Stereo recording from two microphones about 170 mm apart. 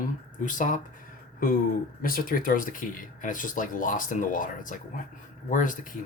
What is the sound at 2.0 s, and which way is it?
Speech, 55° left (ahead or behind).